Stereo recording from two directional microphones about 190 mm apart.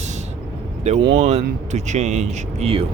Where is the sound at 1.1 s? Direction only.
35° right (ahead or behind).